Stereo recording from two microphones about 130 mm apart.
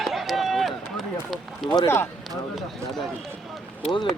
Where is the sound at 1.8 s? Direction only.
20° left (ahead or behind).